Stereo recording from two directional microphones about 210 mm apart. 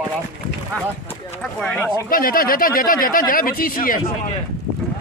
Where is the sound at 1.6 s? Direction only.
5° left (ahead or behind).